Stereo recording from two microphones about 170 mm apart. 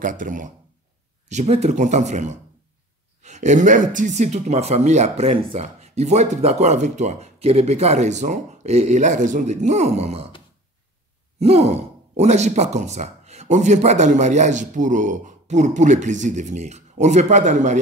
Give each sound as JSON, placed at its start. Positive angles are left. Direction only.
{"t": 0.0, "sound": "speech", "side_deg": -50}
{"t": 1.3, "sound": "speech", "side_deg": -40}
{"t": 11.3, "sound": "speech", "side_deg": -40}